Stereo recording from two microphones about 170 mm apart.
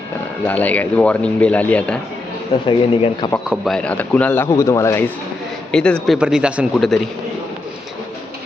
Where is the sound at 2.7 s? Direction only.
30° left (ahead or behind).